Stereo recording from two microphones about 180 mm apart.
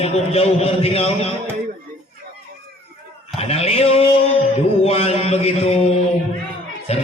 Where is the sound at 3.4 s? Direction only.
35° left (ahead or behind).